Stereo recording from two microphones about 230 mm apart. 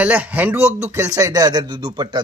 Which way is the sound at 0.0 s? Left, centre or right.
Centre.